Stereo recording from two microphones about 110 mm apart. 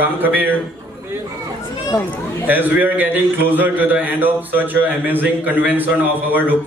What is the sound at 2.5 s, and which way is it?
A man's voice, 15° right (ahead or behind).